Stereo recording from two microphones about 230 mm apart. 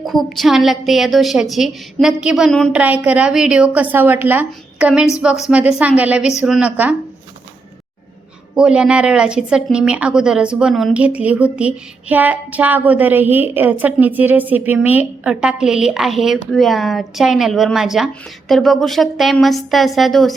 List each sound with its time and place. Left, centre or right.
0.0 s a woman's voice: centre
8.5 s speech: centre